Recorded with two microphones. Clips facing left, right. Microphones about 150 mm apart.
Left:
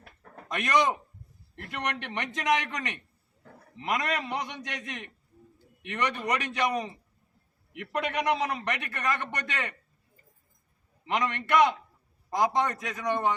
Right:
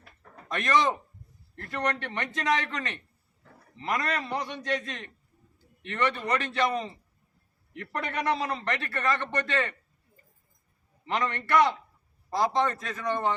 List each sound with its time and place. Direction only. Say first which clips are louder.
0.4 s a man's voice: even; 15° left (ahead or behind)
11.0 s a man's voice: even; 15° left (ahead or behind)